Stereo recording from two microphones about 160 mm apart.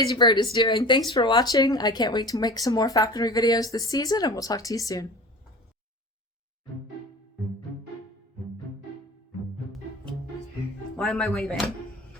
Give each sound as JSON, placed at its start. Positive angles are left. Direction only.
{"t": 0.0, "sound": "speech", "side_deg": 30}
{"t": 10.9, "sound": "speech", "side_deg": 0}